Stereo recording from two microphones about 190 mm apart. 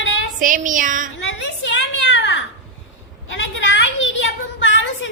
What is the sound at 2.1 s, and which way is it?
Babbling, 75° left (ahead or behind).